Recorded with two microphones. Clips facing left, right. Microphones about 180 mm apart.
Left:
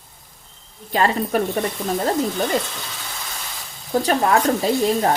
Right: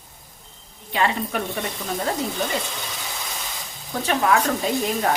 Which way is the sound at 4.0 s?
40° left (ahead or behind).